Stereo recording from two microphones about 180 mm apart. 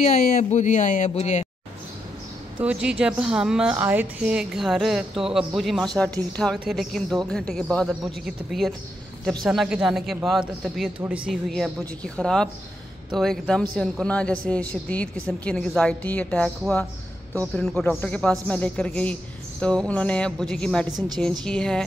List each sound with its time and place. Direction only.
0.4 s speech: 40° left (ahead or behind)
2.6 s a woman's voice: 5° right (ahead or behind)